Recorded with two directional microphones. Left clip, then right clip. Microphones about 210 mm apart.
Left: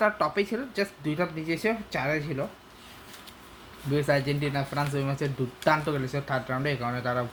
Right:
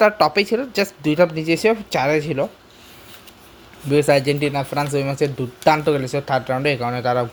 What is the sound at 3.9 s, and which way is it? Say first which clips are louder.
Speech: right 10 dB; 40° right (ahead or behind).